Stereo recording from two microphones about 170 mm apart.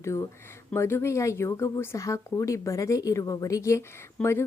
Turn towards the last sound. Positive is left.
turn(degrees=15)  # may be behind; listen again after turning